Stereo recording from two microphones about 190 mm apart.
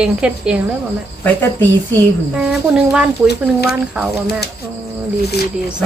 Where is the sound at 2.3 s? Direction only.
5° right (ahead or behind).